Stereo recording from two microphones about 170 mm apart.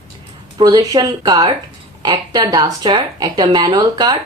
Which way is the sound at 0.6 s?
20° right (ahead or behind).